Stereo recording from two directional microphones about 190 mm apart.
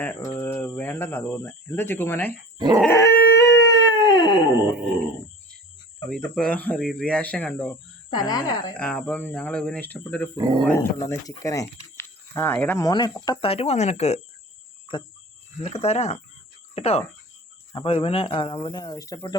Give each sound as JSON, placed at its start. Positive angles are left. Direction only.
{"t": 0.0, "sound": "speech", "side_deg": 10}
{"t": 2.6, "sound": "speech", "side_deg": -20}
{"t": 2.8, "sound": "dog", "side_deg": 15}
{"t": 3.3, "sound": "howl", "side_deg": 20}
{"t": 6.1, "sound": "speech", "side_deg": 5}
{"t": 8.1, "sound": "speech", "side_deg": 20}
{"t": 8.7, "sound": "speech", "side_deg": 10}
{"t": 10.3, "sound": "speech", "side_deg": -25}
{"t": 10.7, "sound": "speech", "side_deg": 15}
{"t": 15.6, "sound": "speech", "side_deg": 35}